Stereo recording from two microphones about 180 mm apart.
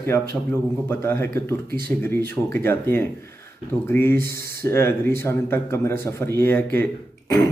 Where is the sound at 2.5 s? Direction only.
10° left (ahead or behind).